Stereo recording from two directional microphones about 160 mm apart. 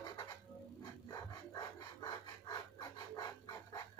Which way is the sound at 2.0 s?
25° left (ahead or behind).